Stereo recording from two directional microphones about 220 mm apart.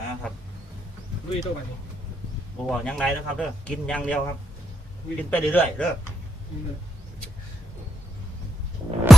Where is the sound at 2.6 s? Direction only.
5° left (ahead or behind).